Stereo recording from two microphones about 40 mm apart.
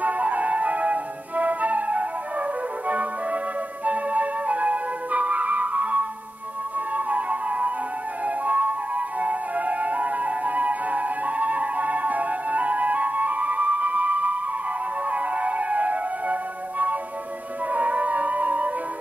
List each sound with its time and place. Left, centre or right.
0.0 s flute: right
6.9 s music: right